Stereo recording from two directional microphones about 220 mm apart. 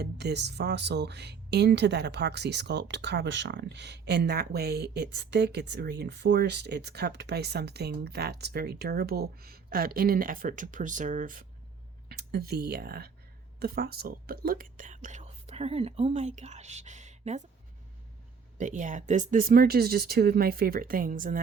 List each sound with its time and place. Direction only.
0.0 s speech: 50° right (ahead or behind); by 17.4 s 30° right (ahead or behind)
18.5 s speech: 35° right (ahead or behind)